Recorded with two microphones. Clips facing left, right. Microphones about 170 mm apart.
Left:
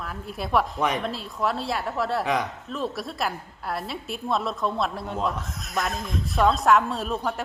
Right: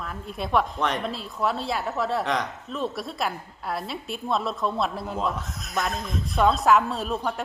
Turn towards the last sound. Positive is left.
turn(degrees=0)  # may be behind; listen again after turning